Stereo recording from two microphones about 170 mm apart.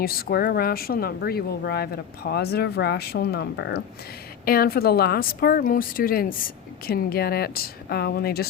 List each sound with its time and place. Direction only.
0.0 s speech: 60° left (ahead or behind)
4.4 s speech: 60° left (ahead or behind)